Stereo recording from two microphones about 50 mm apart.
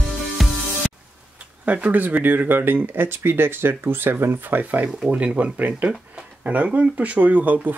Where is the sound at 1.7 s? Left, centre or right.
Right.